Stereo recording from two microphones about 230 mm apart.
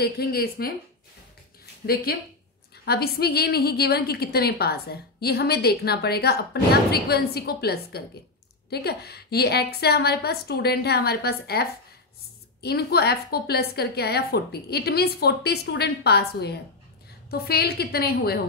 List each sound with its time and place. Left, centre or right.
0.0 s a woman's voice: left
2.8 s a woman's voice: left
12.6 s a woman's voice: left